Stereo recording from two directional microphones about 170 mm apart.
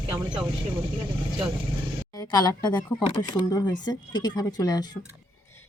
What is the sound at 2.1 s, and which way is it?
Speech, 20° left (ahead or behind).